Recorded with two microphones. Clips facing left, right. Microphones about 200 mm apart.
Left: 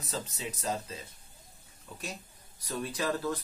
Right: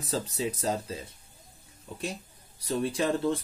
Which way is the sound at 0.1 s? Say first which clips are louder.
Right 7 dB; 30° right (ahead or behind).